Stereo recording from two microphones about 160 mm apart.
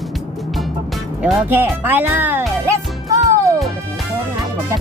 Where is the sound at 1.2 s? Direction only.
10° right (ahead or behind).